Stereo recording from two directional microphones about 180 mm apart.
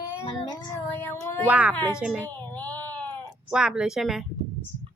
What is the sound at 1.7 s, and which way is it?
Speech, 10° left (ahead or behind).